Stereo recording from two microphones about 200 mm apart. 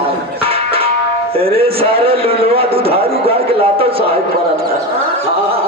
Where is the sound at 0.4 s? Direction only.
30° right (ahead or behind).